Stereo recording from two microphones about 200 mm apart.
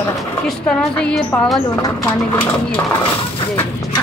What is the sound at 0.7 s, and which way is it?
Speech, 5° left (ahead or behind).